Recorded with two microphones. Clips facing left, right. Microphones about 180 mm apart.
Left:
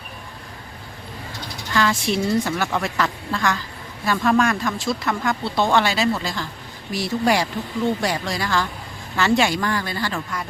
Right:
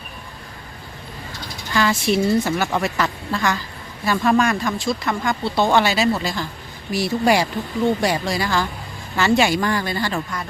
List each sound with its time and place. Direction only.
1.7 s speech: 5° right (ahead or behind)